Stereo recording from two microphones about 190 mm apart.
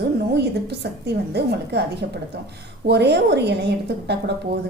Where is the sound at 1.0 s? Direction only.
60° right (ahead or behind).